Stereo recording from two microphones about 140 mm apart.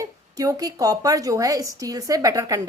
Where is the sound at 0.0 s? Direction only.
25° right (ahead or behind).